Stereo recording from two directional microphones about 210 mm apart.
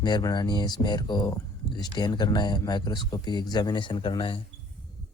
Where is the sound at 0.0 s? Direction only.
20° left (ahead or behind).